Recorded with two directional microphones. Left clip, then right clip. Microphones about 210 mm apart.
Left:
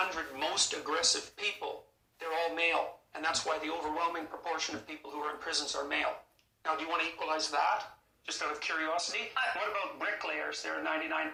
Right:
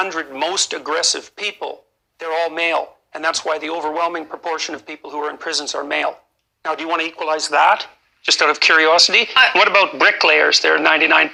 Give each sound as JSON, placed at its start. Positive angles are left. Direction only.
{"t": 0.1, "sound": "a man's voice", "side_deg": -45}